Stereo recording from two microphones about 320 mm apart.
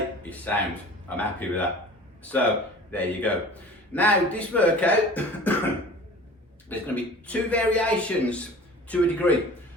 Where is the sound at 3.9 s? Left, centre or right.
Centre.